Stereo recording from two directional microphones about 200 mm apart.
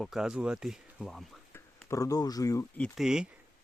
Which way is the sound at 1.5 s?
15° left (ahead or behind).